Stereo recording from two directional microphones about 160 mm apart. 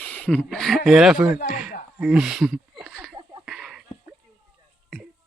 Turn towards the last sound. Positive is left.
turn(degrees=0)  # may be behind; listen again after turning